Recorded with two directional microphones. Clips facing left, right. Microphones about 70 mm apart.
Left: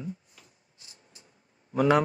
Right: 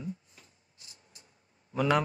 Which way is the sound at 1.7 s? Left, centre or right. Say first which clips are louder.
Left 5 dB; left.